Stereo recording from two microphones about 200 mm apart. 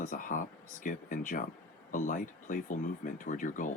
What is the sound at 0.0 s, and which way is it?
Speech, 40° left (ahead or behind).